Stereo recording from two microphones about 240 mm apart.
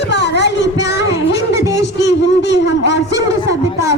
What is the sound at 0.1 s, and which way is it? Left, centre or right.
Child singing, left.